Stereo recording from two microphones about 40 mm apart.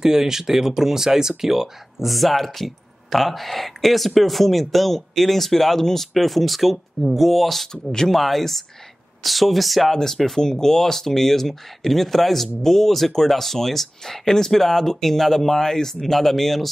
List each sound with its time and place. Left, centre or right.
0.0 s speech: centre
7.7 s speech: centre
8.1 s speech: centre